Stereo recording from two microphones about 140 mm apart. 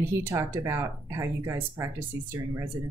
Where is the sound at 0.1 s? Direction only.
20° right (ahead or behind).